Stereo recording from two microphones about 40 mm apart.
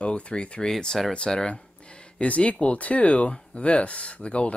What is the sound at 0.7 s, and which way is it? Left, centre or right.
Speech, centre.